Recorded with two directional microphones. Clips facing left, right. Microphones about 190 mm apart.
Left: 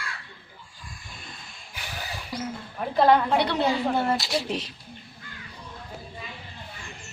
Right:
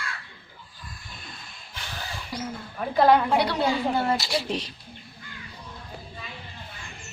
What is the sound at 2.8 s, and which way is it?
Speech, 10° right (ahead or behind).